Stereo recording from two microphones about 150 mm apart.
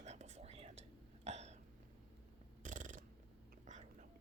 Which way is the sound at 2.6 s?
55° right (ahead or behind).